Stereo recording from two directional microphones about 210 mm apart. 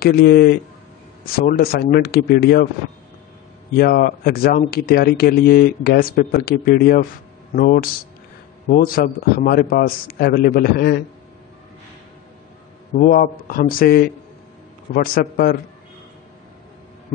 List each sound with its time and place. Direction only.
0.0 s speech: 45° left (ahead or behind)
3.7 s speech: 45° left (ahead or behind)
12.9 s speech: 40° left (ahead or behind)
15.1 s speech: 45° left (ahead or behind)